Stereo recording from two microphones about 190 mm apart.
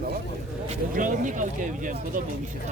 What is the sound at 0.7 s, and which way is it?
Speech, 45° right (ahead or behind).